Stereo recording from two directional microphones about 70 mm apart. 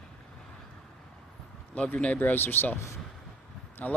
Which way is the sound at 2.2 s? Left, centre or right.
Left.